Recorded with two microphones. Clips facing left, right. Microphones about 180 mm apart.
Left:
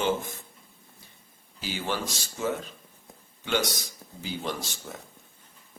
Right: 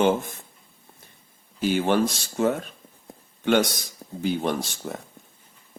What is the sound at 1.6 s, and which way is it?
Speech, 55° right (ahead or behind).